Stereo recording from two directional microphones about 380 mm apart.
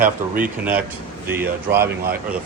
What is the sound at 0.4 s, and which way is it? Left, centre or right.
Speech, centre.